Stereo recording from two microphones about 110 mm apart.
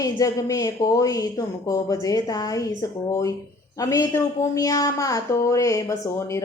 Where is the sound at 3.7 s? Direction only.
30° left (ahead or behind).